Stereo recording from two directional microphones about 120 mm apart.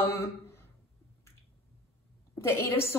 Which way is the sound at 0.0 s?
25° left (ahead or behind).